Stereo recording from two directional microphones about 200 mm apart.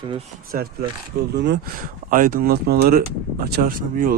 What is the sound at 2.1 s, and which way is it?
Speech, 40° right (ahead or behind).